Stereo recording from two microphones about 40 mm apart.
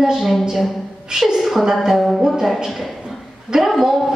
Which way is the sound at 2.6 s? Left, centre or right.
Centre.